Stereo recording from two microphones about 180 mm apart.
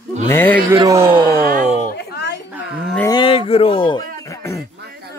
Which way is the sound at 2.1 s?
70° left (ahead or behind).